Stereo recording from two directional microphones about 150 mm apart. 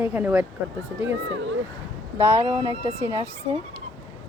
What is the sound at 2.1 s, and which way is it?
Speech, 15° right (ahead or behind).